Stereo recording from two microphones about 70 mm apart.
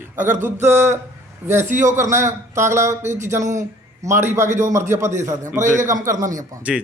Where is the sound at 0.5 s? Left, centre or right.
Right.